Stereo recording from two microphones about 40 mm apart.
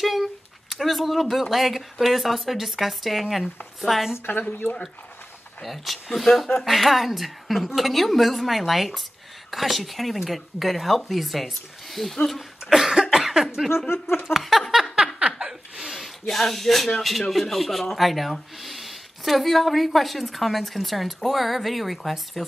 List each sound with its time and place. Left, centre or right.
0.0 s speech: centre
4.3 s speech: left
5.6 s speech: centre
13.6 s a sound: centre
14.3 s speech: centre
14.7 s a sound: centre
15.3 s laughter: centre
16.0 s speech: centre